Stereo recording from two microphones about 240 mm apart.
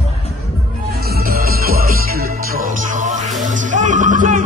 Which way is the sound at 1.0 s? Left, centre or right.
Right.